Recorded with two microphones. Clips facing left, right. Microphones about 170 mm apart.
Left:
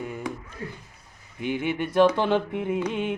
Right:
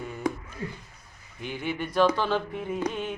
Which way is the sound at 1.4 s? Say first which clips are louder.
Left 5 dB; 55° left (ahead or behind).